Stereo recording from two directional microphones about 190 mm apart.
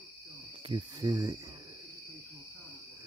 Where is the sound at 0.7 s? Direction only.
20° right (ahead or behind).